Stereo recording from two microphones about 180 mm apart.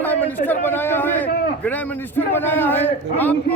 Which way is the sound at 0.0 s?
10° left (ahead or behind).